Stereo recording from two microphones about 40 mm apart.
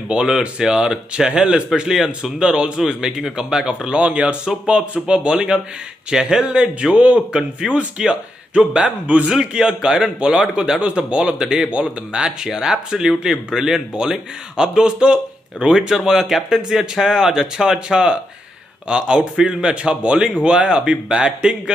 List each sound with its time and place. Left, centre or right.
0.1 s a man's voice: right
3.4 s a man's voice: right
6.4 s a man's voice: right
7.6 s speech: centre
8.1 s a man's voice: right
9.3 s a man's voice: right